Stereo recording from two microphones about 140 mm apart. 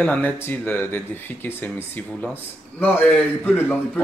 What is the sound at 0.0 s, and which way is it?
Speech, 10° left (ahead or behind).